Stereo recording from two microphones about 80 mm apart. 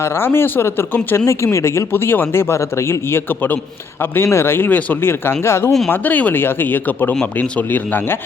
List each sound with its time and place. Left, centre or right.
0.0 s speech: left
5.9 s speech: left